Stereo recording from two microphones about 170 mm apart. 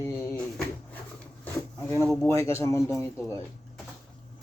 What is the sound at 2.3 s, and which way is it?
Speech, 15° left (ahead or behind).